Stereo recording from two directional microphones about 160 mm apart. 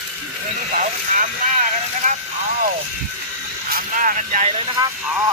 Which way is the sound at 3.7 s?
55° right (ahead or behind).